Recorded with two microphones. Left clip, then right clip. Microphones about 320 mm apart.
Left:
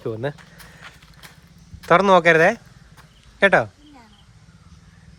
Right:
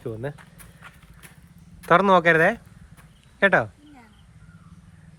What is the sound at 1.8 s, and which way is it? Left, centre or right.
Speech, centre.